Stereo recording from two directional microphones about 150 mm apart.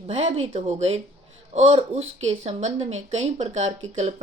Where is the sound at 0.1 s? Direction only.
45° right (ahead or behind).